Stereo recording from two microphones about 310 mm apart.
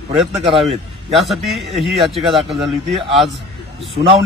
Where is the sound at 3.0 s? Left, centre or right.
Centre.